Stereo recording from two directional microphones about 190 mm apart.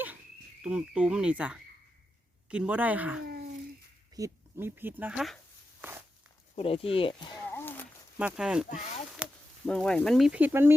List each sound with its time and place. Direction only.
0.6 s speech: 5° right (ahead or behind)
6.6 s speech: 30° left (ahead or behind)
7.4 s a sound: 10° left (ahead or behind)
8.2 s speech: 5° right (ahead or behind)
9.2 s a sound: 5° right (ahead or behind)
9.6 s speech: 5° left (ahead or behind); by 10.8 s 10° right (ahead or behind)